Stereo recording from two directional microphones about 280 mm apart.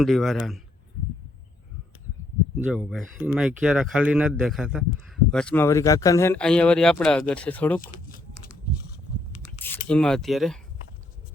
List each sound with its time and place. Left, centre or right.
0.0 s speech: centre
2.6 s speech: centre
7.8 s a sound: left
9.5 s speech: centre